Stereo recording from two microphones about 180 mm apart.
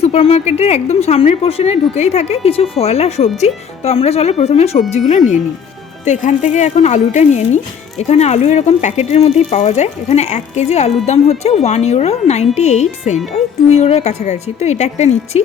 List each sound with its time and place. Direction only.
0.0 s speech: 35° left (ahead or behind)